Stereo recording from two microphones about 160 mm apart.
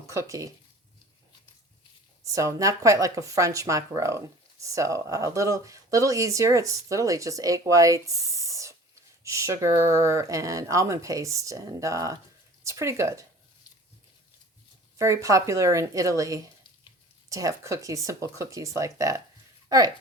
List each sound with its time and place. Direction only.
0.1 s speech: 20° right (ahead or behind)
2.2 s speech: 20° right (ahead or behind)
14.9 s speech: 20° right (ahead or behind)